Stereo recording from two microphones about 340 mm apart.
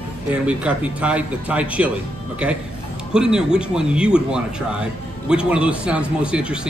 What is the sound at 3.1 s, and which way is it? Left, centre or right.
Speech, centre.